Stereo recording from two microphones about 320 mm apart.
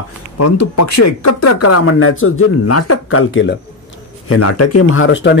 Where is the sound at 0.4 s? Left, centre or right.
Left.